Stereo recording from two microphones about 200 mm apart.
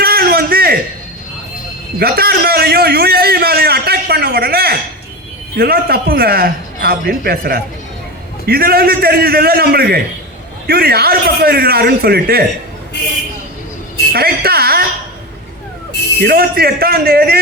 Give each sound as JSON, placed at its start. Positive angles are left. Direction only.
{"t": 0.0, "sound": "a sound", "side_deg": -50}
{"t": 2.0, "sound": "a man's voice", "side_deg": -50}
{"t": 14.1, "sound": "a man's voice", "side_deg": -50}
{"t": 16.2, "sound": "a man's voice", "side_deg": -50}